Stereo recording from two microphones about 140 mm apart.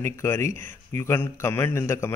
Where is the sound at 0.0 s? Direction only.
20° left (ahead or behind).